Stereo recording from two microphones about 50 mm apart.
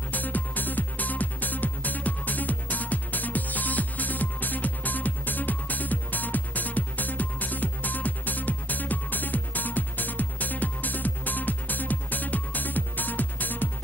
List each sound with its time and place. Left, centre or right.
0.1 s music: left